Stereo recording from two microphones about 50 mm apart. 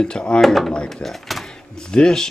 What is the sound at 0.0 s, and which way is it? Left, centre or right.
Speech, centre.